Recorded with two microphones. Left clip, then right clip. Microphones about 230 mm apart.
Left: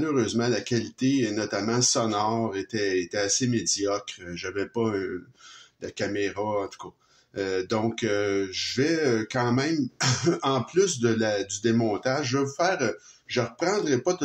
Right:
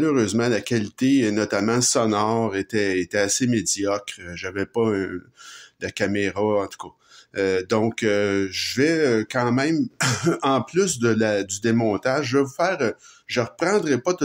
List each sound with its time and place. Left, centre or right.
0.0 s speech: right